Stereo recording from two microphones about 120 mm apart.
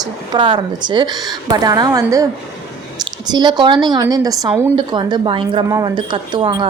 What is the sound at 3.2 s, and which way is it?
Speech, 35° right (ahead or behind).